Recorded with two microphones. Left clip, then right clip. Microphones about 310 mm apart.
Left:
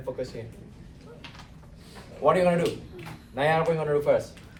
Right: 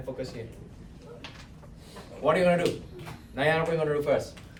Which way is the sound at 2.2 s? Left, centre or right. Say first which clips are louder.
Left 1 dB; centre.